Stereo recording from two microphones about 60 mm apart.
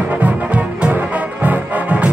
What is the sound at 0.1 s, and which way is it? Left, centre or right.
Music, right.